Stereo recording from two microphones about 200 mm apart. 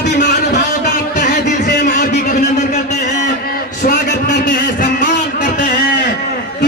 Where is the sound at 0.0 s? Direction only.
60° left (ahead or behind).